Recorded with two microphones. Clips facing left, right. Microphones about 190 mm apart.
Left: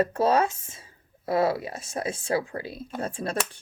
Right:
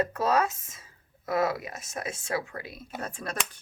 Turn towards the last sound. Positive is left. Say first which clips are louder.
# left 6 dB
turn(degrees=30)  # may be behind; listen again after turning